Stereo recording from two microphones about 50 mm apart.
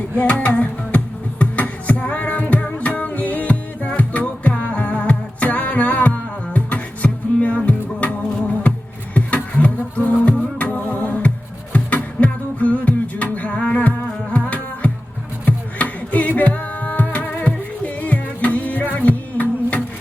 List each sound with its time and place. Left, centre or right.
0.2 s music: left
9.1 s music: left
16.4 s singing: left
17.4 s music: left